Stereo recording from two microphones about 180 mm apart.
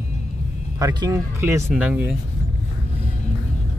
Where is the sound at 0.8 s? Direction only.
20° right (ahead or behind).